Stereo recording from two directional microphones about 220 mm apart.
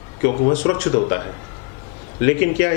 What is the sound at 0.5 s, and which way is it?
A man's voice, 15° left (ahead or behind).